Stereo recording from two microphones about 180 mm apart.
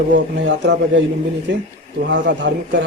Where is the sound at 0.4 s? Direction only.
75° right (ahead or behind).